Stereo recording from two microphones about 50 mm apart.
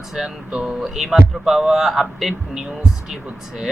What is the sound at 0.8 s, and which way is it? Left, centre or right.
Speech, centre.